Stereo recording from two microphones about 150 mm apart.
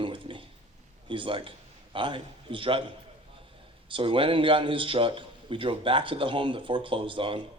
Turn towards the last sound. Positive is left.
turn(degrees=-35)  # may be behind; listen again after turning